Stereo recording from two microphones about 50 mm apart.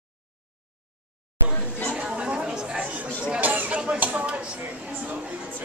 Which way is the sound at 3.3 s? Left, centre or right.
Right.